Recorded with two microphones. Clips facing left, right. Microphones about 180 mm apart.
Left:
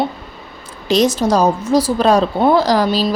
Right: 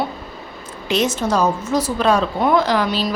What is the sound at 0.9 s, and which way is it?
A woman's voice, 35° left (ahead or behind).